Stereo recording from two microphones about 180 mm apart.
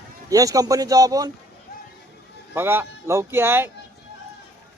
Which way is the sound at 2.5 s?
10° right (ahead or behind).